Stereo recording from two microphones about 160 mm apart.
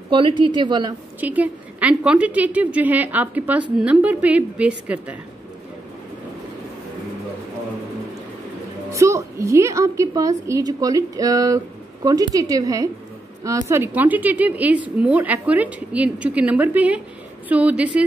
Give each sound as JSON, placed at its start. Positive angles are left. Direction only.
{"t": 0.1, "sound": "a woman's voice", "side_deg": -30}
{"t": 1.2, "sound": "a woman's voice", "side_deg": -10}
{"t": 8.9, "sound": "a woman's voice", "side_deg": -20}